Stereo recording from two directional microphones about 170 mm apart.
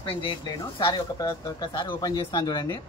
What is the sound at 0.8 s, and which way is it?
Speech, 25° left (ahead or behind).